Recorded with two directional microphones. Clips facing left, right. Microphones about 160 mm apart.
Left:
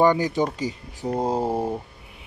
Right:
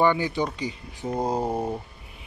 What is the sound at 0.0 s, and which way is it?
Speech, 40° left (ahead or behind).